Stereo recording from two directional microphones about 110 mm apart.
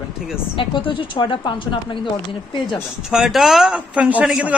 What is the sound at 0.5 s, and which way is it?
Speech, 50° left (ahead or behind).